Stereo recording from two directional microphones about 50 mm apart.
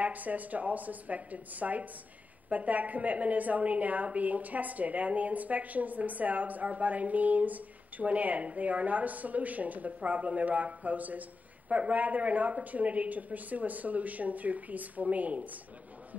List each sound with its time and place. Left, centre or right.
0.0 s a woman's voice: right